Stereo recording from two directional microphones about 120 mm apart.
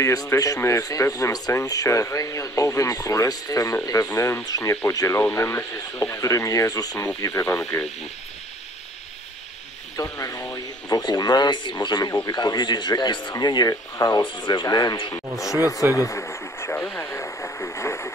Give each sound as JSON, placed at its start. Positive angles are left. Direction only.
{"t": 0.0, "sound": "a man's voice", "side_deg": 25}
{"t": 7.5, "sound": "speech", "side_deg": 5}
{"t": 9.9, "sound": "a man's voice", "side_deg": 25}
{"t": 14.2, "sound": "a man's voice", "side_deg": 40}
{"t": 15.9, "sound": "radio", "side_deg": 25}